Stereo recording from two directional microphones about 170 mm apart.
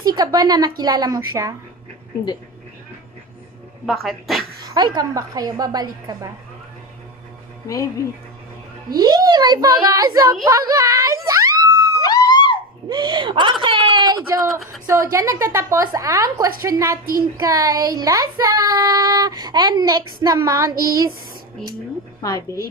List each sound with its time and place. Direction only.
0.0 s child singing: 25° right (ahead or behind)
3.8 s speech: centre (ahead or behind)
4.7 s child singing: 25° right (ahead or behind)
7.6 s speech: 20° left (ahead or behind)
8.9 s a child's voice: 20° right (ahead or behind)
12.0 s a sound: 25° left (ahead or behind)
12.9 s a woman's voice: 25° right (ahead or behind)
16.6 s child singing: 20° right (ahead or behind)
22.2 s speech: 20° left (ahead or behind)